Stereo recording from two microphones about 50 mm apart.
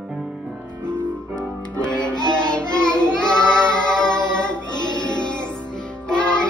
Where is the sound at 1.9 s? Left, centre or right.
Left.